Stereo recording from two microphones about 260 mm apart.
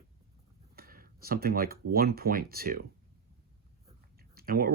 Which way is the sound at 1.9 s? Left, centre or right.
Right.